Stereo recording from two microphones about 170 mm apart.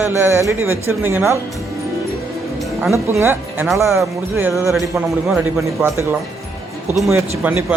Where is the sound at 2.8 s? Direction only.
15° right (ahead or behind).